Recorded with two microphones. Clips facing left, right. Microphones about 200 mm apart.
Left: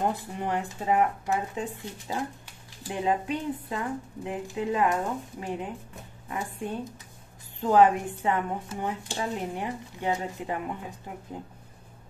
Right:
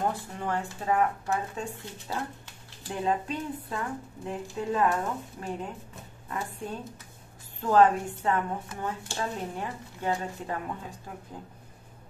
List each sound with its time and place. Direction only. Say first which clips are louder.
0.0 s speech: left 2 dB; 15° left (ahead or behind)
7.6 s speech: left 1 dB; 15° left (ahead or behind)